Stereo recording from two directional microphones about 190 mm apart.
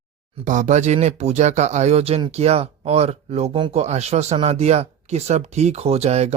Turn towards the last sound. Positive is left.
turn(degrees=-35)  # may be behind; listen again after turning